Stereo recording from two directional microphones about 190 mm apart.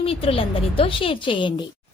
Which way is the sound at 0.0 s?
30° left (ahead or behind).